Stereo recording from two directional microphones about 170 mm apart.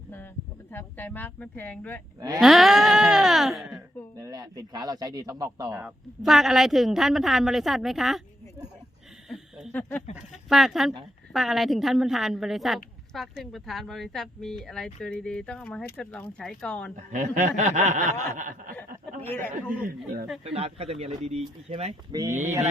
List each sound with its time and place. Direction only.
0.7 s a woman's voice: 10° left (ahead or behind)
4.2 s speech: 20° right (ahead or behind)
5.8 s a woman's voice: centre (ahead or behind)
9.3 s a sound: centre (ahead or behind)
10.5 s a woman's voice: centre (ahead or behind)
16.9 s speech: 45° right (ahead or behind)
19.2 s speech: 10° left (ahead or behind)
20.4 s speech: 35° right (ahead or behind)
22.1 s speech: 20° right (ahead or behind)